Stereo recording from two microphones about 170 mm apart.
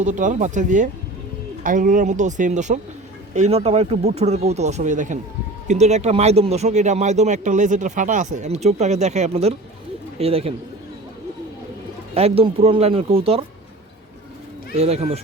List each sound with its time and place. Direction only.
0.0 s speech: 45° right (ahead or behind)
12.1 s speech: 35° right (ahead or behind)
14.8 s speech: 40° right (ahead or behind)